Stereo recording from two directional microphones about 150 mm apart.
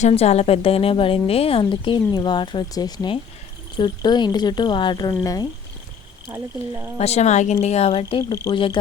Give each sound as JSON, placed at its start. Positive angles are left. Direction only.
{"t": 0.0, "sound": "speech", "side_deg": 45}
{"t": 6.2, "sound": "speech", "side_deg": -15}
{"t": 7.0, "sound": "a woman's voice", "side_deg": 45}